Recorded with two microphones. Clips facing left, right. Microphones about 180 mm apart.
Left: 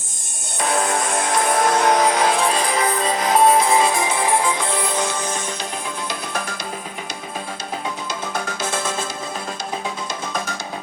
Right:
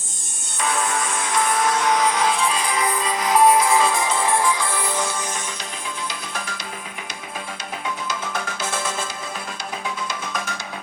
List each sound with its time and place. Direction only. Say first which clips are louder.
0.6 s music: left 3 dB; 35° left (ahead or behind)
2.0 s music: left 3 dB; 85° left
2.3 s music: left 3 dB; 40° left (ahead or behind); by 5.4 s 20° left (ahead or behind)